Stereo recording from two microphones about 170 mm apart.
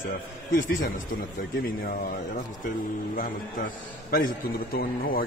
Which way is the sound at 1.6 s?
60° left (ahead or behind).